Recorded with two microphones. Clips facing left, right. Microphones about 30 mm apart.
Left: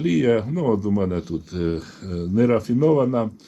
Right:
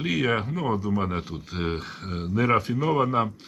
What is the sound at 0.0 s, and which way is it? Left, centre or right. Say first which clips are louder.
Speech: left 6 dB; right.